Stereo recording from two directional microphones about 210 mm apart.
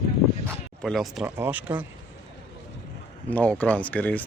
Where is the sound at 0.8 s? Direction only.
Centre (ahead or behind).